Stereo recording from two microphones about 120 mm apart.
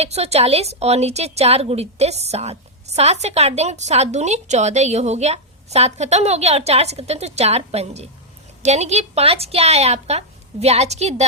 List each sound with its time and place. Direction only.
0.0 s a woman's voice: 60° right (ahead or behind)